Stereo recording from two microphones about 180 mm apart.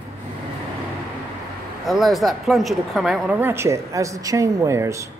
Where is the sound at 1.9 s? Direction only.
Centre (ahead or behind).